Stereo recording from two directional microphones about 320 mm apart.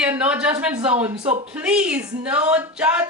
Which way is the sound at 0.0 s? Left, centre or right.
Centre.